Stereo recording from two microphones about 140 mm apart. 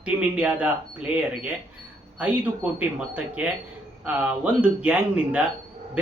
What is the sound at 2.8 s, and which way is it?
Speech, 10° right (ahead or behind).